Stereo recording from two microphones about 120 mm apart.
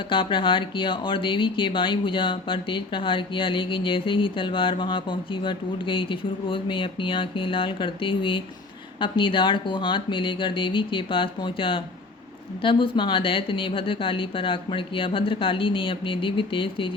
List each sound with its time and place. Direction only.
0.1 s speech: 45° left (ahead or behind)